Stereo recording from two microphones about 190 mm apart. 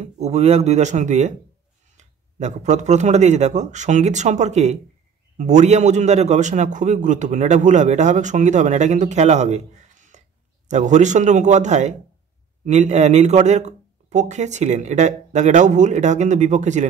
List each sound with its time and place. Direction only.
0.0 s a man's voice: 35° right (ahead or behind)